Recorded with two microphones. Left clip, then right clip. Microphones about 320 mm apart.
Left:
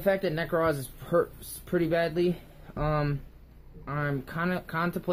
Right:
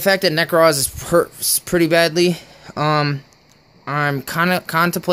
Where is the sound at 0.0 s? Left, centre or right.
Right.